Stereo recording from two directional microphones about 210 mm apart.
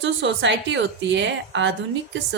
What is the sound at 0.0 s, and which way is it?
A woman's voice, 60° right (ahead or behind).